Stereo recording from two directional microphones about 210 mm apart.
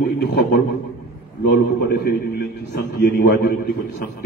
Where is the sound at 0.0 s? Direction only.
55° left (ahead or behind).